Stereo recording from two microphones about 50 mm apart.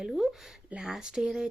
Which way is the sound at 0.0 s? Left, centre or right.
Centre.